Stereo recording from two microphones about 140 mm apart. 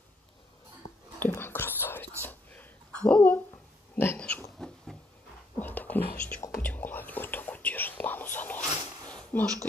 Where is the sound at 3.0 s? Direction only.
10° left (ahead or behind).